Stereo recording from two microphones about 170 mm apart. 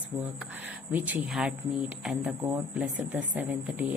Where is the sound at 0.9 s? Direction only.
10° right (ahead or behind).